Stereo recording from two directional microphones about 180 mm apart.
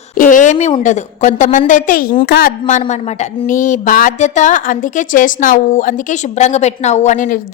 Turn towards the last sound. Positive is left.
turn(degrees=45)  # may be behind; listen again after turning